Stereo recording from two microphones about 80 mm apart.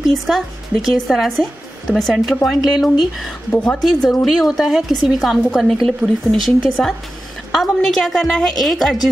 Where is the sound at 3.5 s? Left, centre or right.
Centre.